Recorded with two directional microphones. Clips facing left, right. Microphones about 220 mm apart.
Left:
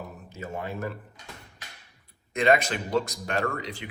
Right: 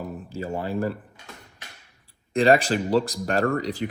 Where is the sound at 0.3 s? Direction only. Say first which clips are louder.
Right 5 dB; 30° right (ahead or behind).